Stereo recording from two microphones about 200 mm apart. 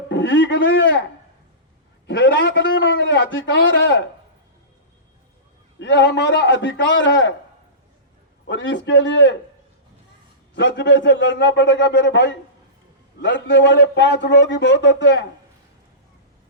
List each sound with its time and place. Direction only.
0.1 s a man's voice: 65° left (ahead or behind)
2.0 s a man's voice: 65° left (ahead or behind)
5.8 s a man's voice: 65° left (ahead or behind)
8.4 s a man's voice: 65° left (ahead or behind)
10.5 s a man's voice: 65° left (ahead or behind)